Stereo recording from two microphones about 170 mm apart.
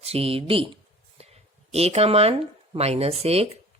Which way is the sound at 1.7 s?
35° right (ahead or behind).